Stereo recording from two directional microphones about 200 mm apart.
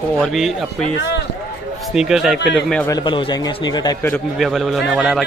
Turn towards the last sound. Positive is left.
turn(degrees=0)  # may be behind; listen again after turning